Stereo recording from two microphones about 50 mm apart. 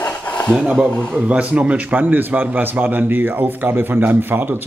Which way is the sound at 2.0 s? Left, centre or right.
Right.